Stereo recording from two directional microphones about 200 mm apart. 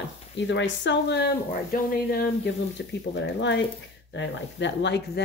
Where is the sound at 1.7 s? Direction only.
45° left (ahead or behind).